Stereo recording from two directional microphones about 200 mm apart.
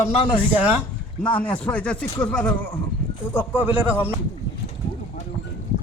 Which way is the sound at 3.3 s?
10° right (ahead or behind).